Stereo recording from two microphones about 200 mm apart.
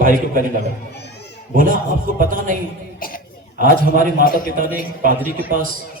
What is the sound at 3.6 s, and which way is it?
Speech, 45° right (ahead or behind).